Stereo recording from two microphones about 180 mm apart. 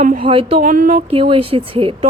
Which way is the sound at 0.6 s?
50° right (ahead or behind).